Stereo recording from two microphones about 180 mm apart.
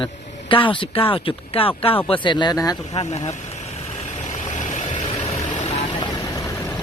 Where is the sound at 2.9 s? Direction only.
35° left (ahead or behind).